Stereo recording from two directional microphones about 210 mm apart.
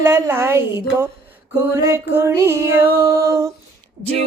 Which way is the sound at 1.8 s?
15° right (ahead or behind).